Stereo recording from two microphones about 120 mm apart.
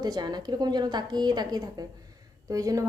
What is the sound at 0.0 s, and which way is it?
A woman's voice, 35° right (ahead or behind).